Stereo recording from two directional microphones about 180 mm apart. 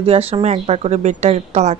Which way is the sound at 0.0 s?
35° right (ahead or behind).